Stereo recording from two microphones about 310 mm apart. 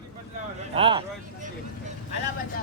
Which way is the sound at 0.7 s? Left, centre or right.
Centre.